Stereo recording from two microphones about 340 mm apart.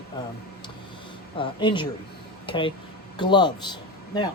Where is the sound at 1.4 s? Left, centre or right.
Centre.